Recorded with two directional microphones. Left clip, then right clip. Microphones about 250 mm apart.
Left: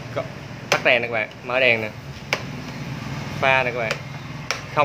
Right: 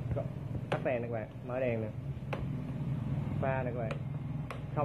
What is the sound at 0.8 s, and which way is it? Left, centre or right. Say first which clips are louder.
Speech: left 17 dB; left.